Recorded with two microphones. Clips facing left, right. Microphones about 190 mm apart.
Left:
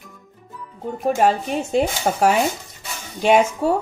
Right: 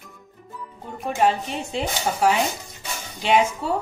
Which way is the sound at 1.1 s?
45° left (ahead or behind).